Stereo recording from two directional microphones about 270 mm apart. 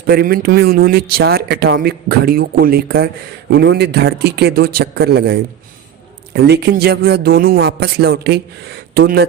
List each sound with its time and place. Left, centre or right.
0.1 s speech: right